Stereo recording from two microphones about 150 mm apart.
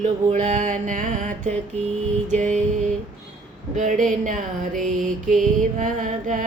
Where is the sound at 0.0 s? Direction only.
50° right (ahead or behind).